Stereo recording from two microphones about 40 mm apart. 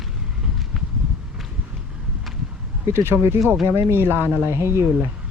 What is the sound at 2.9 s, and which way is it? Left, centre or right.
Speech, right.